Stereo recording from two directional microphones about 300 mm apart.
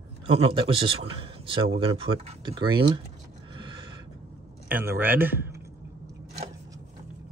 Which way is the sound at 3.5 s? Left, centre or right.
Centre.